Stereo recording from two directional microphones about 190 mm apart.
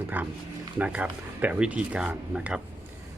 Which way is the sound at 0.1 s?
10° right (ahead or behind).